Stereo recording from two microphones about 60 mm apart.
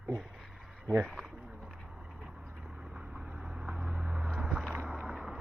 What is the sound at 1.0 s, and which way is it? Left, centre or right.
Speech, centre.